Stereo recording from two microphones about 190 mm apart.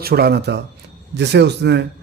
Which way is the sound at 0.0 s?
55° right (ahead or behind).